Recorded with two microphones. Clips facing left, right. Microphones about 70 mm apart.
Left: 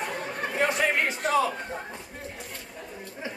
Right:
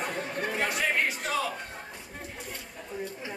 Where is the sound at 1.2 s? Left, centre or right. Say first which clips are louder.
Left 6 dB; centre.